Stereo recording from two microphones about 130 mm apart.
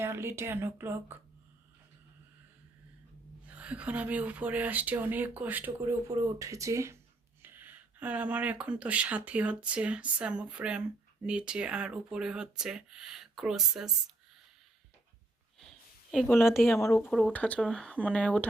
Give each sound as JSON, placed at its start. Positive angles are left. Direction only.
{"t": 0.0, "sound": "a woman's voice", "side_deg": -20}
{"t": 3.5, "sound": "speech", "side_deg": -10}
{"t": 16.2, "sound": "speech", "side_deg": 15}
{"t": 16.6, "sound": "speech", "side_deg": 0}
{"t": 16.8, "sound": "speech", "side_deg": 25}
{"t": 17.1, "sound": "speech", "side_deg": 5}